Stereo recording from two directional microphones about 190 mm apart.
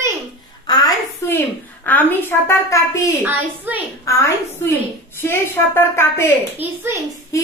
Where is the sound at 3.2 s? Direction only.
10° right (ahead or behind).